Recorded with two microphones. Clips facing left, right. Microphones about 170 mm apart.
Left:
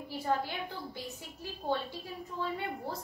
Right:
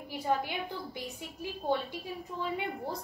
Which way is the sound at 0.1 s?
15° right (ahead or behind).